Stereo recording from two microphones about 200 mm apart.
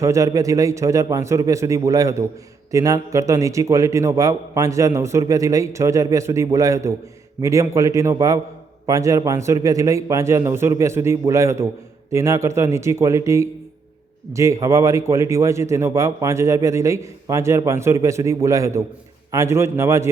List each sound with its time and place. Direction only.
0.0 s a man's voice: 15° right (ahead or behind)